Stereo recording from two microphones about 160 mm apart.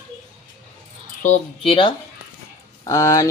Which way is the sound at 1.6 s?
30° left (ahead or behind).